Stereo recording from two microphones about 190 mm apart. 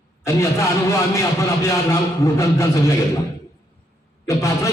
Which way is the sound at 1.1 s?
15° left (ahead or behind).